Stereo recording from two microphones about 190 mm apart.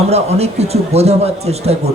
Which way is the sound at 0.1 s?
35° right (ahead or behind).